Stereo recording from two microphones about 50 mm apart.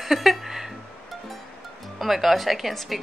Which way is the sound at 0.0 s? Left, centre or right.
Centre.